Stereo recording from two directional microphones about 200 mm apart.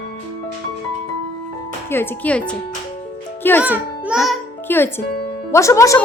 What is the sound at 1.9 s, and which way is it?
Speech, 10° left (ahead or behind).